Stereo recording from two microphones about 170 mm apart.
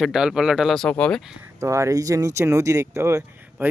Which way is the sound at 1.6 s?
15° right (ahead or behind).